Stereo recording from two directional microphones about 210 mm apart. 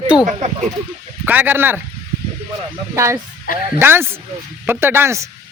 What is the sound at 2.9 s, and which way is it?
A man's voice, 15° right (ahead or behind).